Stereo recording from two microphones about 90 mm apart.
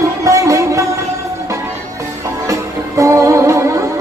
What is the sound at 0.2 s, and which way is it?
Music, 35° right (ahead or behind).